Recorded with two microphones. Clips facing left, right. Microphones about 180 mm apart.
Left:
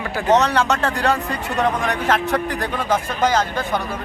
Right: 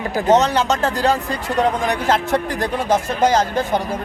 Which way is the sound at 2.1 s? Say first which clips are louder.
Right 1 dB; 40° right (ahead or behind).